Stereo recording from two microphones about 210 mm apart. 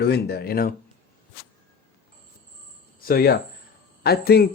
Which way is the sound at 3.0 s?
45° left (ahead or behind).